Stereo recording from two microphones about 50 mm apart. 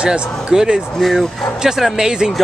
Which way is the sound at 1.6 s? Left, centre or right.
Centre.